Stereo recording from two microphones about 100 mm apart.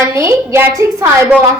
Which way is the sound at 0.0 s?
30° right (ahead or behind).